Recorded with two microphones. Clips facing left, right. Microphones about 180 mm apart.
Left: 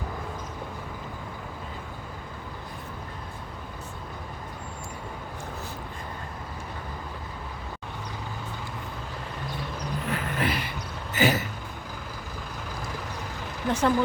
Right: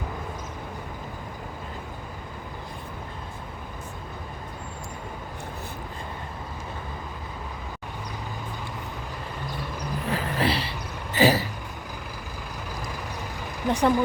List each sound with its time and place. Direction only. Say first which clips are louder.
10.1 s vehicle: right 3 dB; 35° right (ahead or behind)
11.1 s a sound: right 4 dB; 35° right (ahead or behind)
13.7 s speech: right 2 dB; 15° right (ahead or behind)